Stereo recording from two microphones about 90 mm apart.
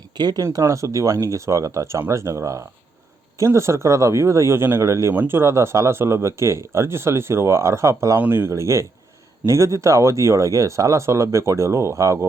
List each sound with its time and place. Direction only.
0.2 s speech: 50° right (ahead or behind)
0.4 s speech: 35° right (ahead or behind)